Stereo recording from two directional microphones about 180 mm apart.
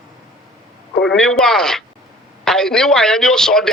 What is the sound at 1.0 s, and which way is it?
A man's voice, centre (ahead or behind).